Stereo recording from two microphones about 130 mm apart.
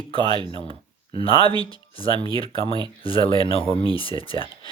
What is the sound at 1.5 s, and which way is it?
Speech, 35° right (ahead or behind).